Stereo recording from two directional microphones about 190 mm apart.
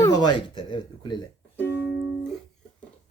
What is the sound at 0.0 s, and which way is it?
Speech, 25° left (ahead or behind).